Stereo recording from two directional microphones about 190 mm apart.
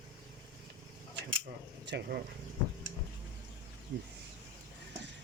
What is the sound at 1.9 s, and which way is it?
Speech, 60° right (ahead or behind).